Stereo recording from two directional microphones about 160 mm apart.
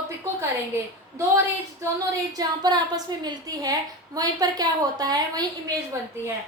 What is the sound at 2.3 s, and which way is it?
A woman's voice, 25° right (ahead or behind).